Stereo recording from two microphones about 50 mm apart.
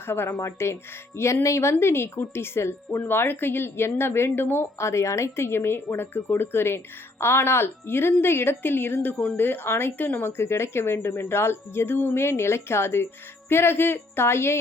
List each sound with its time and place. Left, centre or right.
0.0 s speech: left
0.3 s a woman's voice: left
3.0 s a woman's voice: left
4.8 s speech: left
5.5 s a woman's voice: left
10.0 s speech: left
10.2 s a woman's voice: left